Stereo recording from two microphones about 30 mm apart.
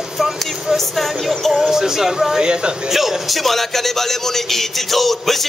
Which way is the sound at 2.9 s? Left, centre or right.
Centre.